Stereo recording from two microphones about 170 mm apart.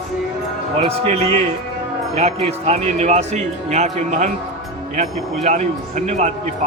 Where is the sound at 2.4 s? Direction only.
40° right (ahead or behind).